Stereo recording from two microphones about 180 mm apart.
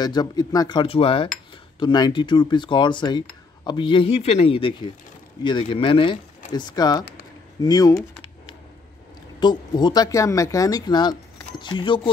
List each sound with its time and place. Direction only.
0.0 s speech: 20° left (ahead or behind)
9.4 s speech: 25° left (ahead or behind)